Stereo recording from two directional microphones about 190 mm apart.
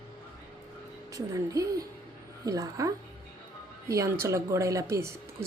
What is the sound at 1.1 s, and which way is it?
Speech, 20° right (ahead or behind).